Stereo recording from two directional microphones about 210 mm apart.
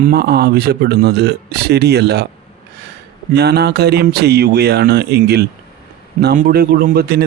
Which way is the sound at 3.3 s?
50° right (ahead or behind).